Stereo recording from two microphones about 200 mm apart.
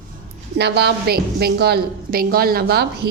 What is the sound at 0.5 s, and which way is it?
A woman's voice, 55° right (ahead or behind).